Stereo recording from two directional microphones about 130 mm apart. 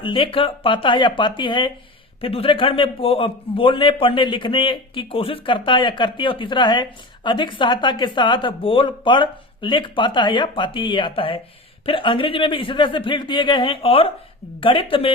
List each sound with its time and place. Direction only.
0.0 s a man's voice: 40° left (ahead or behind)